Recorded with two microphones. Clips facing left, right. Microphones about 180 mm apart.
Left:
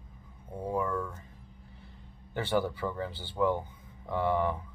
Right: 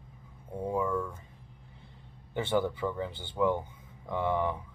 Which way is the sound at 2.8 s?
10° right (ahead or behind).